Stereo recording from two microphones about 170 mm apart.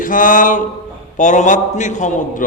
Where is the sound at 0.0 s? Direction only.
50° left (ahead or behind).